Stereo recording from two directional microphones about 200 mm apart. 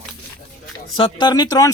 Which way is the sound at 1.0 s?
25° left (ahead or behind).